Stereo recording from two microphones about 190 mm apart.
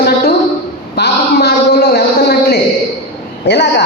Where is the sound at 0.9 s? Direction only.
60° left (ahead or behind).